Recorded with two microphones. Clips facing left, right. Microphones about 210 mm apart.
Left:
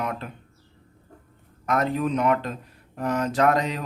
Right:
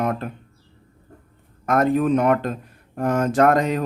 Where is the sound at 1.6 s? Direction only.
50° right (ahead or behind).